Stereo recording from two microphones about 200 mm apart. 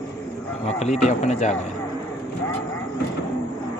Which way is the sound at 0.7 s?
35° left (ahead or behind).